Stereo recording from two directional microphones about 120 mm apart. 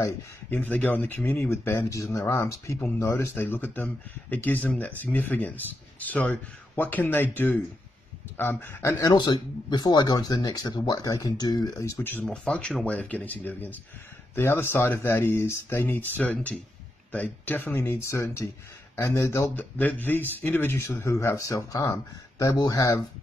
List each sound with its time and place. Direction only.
0.5 s speech: 15° left (ahead or behind); by 11.9 s 30° left (ahead or behind)
12.0 s speech: 15° left (ahead or behind); by 22.9 s 35° left (ahead or behind)